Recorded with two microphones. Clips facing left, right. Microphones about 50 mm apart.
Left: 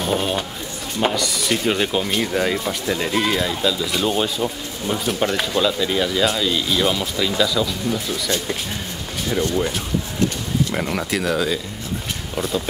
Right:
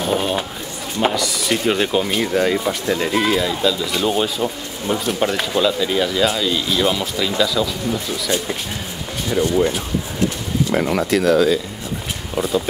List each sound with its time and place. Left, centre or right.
0.0 s speech: centre
8.3 s speech: centre
9.6 s speech: centre